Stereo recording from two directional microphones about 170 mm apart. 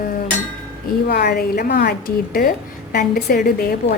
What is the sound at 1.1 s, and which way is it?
A woman's voice, 65° left (ahead or behind).